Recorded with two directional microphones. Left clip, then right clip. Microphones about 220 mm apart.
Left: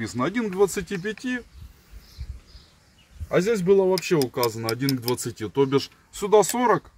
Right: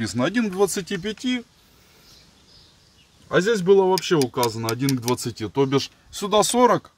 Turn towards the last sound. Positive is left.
turn(degrees=-45)  # may be behind; listen again after turning